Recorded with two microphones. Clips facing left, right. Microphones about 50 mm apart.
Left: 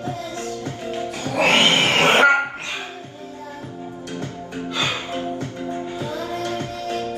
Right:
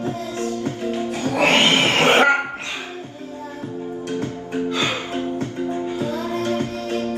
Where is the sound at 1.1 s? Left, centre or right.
Right.